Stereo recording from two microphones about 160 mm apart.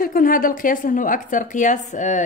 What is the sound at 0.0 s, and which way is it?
A woman's voice, 60° left (ahead or behind).